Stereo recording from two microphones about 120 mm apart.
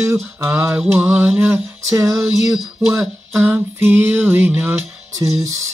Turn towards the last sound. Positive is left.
turn(degrees=-25)  # may be behind; listen again after turning